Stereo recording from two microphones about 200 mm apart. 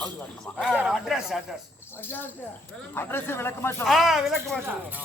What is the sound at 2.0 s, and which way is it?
Speech, 10° left (ahead or behind).